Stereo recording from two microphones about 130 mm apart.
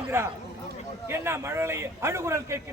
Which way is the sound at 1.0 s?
20° right (ahead or behind).